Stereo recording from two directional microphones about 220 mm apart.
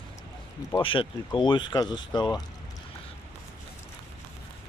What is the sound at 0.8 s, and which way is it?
Speech, 20° left (ahead or behind).